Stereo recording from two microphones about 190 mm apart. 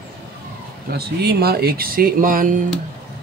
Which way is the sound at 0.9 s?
55° right (ahead or behind).